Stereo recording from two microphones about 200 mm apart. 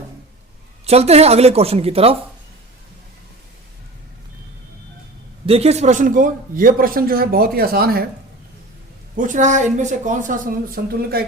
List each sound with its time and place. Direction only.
0.9 s a woman's voice: 30° right (ahead or behind)
5.5 s speech: 30° right (ahead or behind); by 8.0 s 50° right (ahead or behind)
9.1 s a woman's voice: 40° right (ahead or behind)